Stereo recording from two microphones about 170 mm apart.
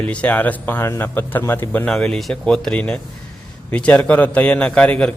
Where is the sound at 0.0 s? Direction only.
10° left (ahead or behind).